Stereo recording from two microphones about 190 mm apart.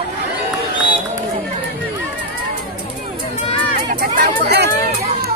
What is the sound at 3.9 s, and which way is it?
Speech, 55° right (ahead or behind).